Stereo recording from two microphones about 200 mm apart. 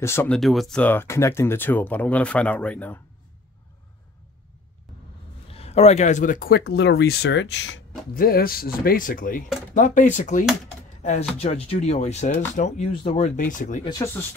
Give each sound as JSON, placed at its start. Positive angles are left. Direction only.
{"t": 0.0, "sound": "speech", "side_deg": 10}
{"t": 5.5, "sound": "speech", "side_deg": 30}
{"t": 8.1, "sound": "speech", "side_deg": 45}
{"t": 13.4, "sound": "speech", "side_deg": 40}